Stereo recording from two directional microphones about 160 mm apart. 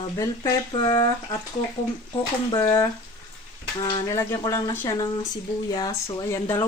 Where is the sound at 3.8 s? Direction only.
25° left (ahead or behind).